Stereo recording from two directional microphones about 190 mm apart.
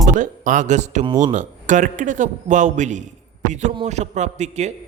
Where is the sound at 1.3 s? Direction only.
40° right (ahead or behind).